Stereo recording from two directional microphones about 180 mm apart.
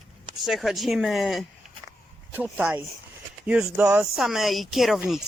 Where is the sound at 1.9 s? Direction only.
10° right (ahead or behind).